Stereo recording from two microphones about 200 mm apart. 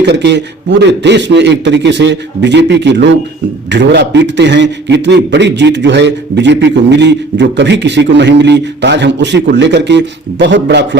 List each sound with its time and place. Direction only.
0.0 s a man's voice: 60° right (ahead or behind)